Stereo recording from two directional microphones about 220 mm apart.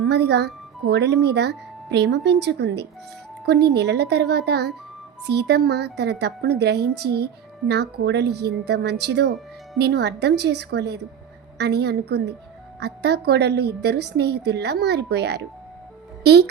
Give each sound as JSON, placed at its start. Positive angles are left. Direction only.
{"t": 0.0, "sound": "speech", "side_deg": -50}